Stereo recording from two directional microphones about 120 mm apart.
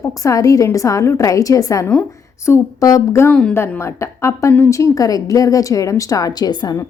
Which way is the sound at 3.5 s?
20° left (ahead or behind).